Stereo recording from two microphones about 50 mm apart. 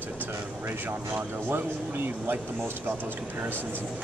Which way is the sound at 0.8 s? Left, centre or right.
Right.